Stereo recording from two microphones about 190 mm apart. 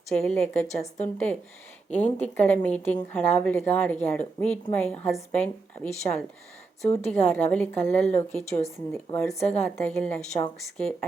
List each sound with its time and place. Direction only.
0.2 s a woman's voice: 5° left (ahead or behind)
1.9 s a woman's voice: 10° left (ahead or behind)